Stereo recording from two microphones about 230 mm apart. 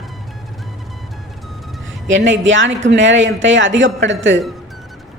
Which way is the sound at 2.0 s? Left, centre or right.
Right.